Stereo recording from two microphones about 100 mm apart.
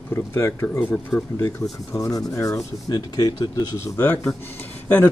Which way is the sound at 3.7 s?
30° left (ahead or behind).